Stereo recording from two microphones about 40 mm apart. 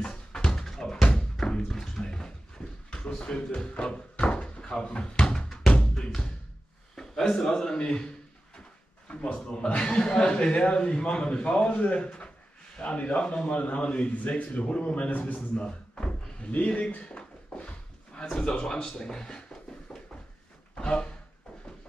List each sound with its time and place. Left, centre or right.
0.0 s dog: centre
0.7 s drum: centre
1.7 s music: centre
2.9 s door: left
5.8 s music: left
7.0 s a man's voice: centre
13.5 s speech: left
17.0 s a sound: left
18.3 s a man's voice: left
19.9 s a sound: centre
20.7 s a sound: left